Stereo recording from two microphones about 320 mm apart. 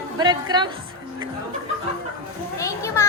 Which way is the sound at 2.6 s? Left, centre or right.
Centre.